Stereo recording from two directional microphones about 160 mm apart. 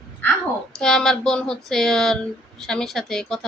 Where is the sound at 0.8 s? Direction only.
5° left (ahead or behind).